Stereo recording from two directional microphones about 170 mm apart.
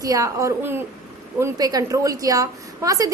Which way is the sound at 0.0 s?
20° right (ahead or behind).